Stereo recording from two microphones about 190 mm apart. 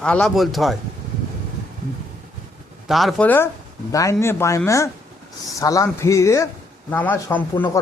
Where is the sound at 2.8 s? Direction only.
Centre (ahead or behind).